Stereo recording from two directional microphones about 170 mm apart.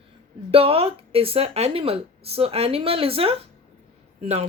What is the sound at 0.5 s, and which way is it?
A woman's voice, 35° right (ahead or behind).